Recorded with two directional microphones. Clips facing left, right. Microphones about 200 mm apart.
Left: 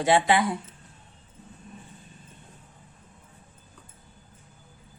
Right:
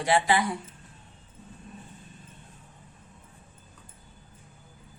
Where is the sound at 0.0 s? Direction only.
25° left (ahead or behind).